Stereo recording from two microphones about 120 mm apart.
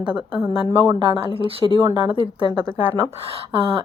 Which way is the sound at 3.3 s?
50° right (ahead or behind).